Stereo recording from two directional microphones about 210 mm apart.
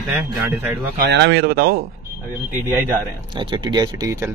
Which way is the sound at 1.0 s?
55° right (ahead or behind).